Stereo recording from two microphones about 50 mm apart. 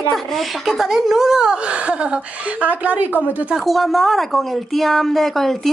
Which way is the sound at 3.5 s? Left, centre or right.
Centre.